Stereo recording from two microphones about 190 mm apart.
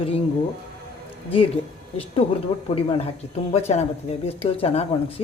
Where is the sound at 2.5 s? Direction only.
25° left (ahead or behind).